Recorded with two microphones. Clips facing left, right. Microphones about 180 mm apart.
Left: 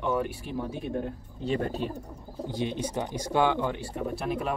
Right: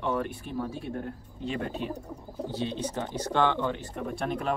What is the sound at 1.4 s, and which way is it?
Speech, 40° left (ahead or behind).